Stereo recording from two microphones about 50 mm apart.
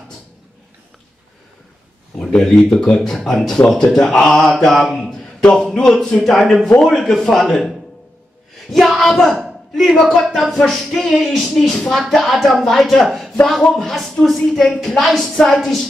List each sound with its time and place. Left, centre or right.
2.1 s speech: centre
4.8 s a man's voice: centre
5.2 s a sound: centre
5.7 s speech: centre
6.2 s speech: centre